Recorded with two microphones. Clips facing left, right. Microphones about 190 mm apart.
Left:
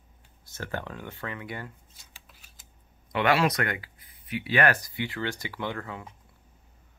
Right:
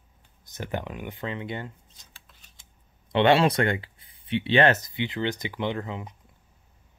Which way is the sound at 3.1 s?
25° right (ahead or behind).